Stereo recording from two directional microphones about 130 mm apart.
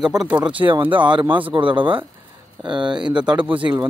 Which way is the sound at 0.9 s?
35° right (ahead or behind).